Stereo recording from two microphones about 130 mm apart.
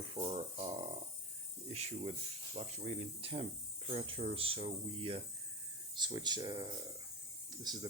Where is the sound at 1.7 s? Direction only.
55° right (ahead or behind).